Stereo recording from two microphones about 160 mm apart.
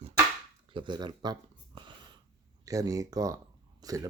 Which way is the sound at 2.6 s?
20° right (ahead or behind).